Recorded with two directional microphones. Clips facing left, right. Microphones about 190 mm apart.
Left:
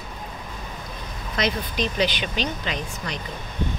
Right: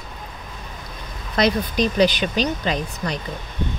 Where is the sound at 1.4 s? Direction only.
40° right (ahead or behind).